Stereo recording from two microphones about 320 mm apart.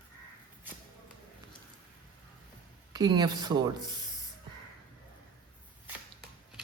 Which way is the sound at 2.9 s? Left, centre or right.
Centre.